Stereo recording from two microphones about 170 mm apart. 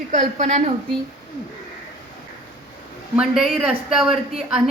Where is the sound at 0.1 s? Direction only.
45° right (ahead or behind).